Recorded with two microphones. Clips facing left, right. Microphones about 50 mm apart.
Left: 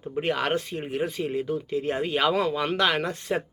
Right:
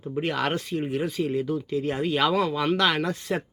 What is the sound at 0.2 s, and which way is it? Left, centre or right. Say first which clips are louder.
Speech: left 1 dB; left.